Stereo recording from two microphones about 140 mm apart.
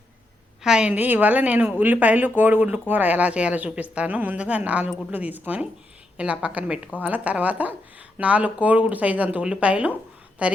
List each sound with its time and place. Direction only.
0.6 s speech: 5° right (ahead or behind)